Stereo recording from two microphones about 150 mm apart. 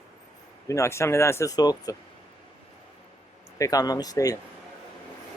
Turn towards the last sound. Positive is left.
turn(degrees=25)  # may be behind; listen again after turning